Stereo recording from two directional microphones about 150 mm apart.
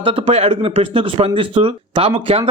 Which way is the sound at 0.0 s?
40° right (ahead or behind).